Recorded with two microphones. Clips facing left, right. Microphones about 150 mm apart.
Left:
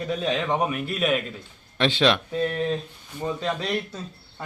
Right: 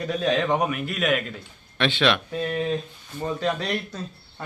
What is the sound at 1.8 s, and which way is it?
Speech, 35° left (ahead or behind).